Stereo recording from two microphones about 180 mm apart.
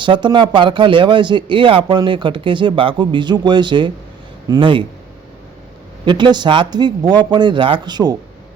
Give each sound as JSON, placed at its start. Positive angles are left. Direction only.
{"t": 0.0, "sound": "a man's voice", "side_deg": -25}
{"t": 6.1, "sound": "a man's voice", "side_deg": -25}